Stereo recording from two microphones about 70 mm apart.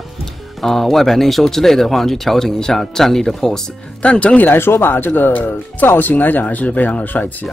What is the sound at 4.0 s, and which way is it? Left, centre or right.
Speech, centre.